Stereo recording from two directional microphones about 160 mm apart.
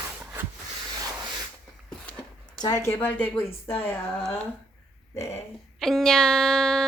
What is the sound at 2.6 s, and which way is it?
A woman's voice, 20° left (ahead or behind).